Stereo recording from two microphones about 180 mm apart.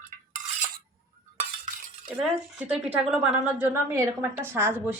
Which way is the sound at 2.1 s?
5° right (ahead or behind).